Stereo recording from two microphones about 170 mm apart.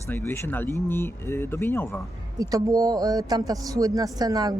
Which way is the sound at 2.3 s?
20° right (ahead or behind).